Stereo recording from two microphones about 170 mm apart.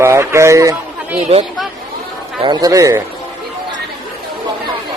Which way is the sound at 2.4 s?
25° right (ahead or behind).